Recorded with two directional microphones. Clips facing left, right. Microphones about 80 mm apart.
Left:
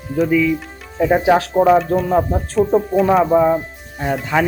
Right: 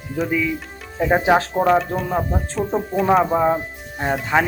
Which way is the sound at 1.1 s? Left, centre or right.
Centre.